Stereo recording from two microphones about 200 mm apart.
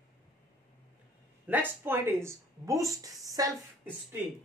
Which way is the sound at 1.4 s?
10° right (ahead or behind).